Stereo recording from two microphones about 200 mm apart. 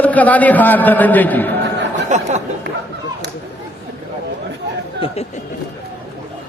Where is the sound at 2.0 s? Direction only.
35° right (ahead or behind).